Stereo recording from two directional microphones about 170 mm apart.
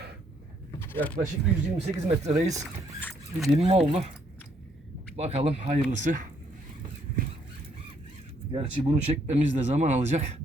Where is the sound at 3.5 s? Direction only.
35° right (ahead or behind).